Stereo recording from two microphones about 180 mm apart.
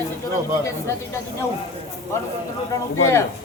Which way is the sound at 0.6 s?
15° left (ahead or behind).